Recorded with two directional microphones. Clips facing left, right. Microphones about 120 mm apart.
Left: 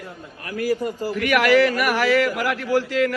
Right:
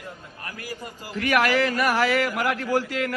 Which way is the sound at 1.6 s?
25° right (ahead or behind).